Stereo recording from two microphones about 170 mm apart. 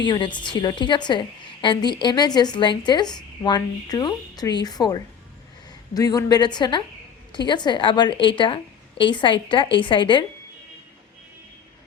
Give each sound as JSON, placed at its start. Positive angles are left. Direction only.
{"t": 0.0, "sound": "a woman's voice", "side_deg": 25}